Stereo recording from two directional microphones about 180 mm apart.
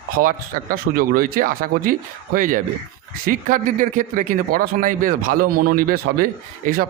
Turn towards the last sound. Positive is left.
turn(degrees=-55)  # may be behind; listen again after turning